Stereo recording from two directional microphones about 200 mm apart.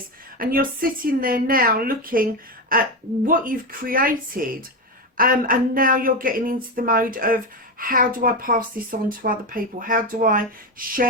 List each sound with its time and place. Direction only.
0.3 s speech: 45° right (ahead or behind)